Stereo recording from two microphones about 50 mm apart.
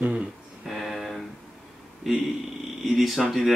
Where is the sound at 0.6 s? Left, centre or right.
Centre.